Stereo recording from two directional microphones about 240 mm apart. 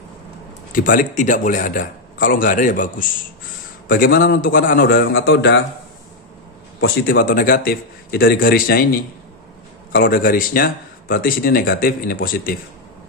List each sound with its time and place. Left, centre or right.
0.7 s a man's voice: left
7.1 s speech: left
9.9 s speech: left